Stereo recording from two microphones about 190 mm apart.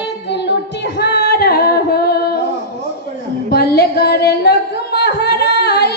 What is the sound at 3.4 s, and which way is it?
Singing, 55° left (ahead or behind).